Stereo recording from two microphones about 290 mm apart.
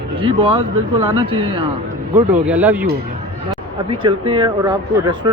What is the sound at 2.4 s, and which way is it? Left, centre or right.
Speech, centre.